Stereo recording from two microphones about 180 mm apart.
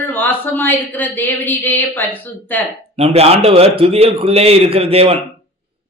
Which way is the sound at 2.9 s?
35° right (ahead or behind).